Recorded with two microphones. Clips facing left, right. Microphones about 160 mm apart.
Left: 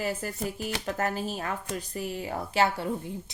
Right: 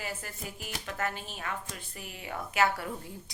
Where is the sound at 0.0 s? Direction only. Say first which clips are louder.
Left 9 dB; 40° left (ahead or behind).